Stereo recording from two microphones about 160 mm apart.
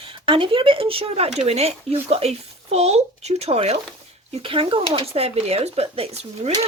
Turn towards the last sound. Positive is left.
turn(degrees=-40)  # may be behind; listen again after turning